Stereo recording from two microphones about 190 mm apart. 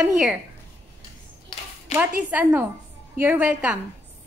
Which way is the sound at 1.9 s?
35° left (ahead or behind).